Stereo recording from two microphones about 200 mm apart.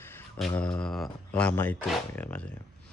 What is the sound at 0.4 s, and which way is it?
Speech, centre (ahead or behind).